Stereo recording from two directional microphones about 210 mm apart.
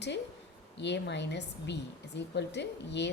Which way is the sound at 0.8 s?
55° left (ahead or behind).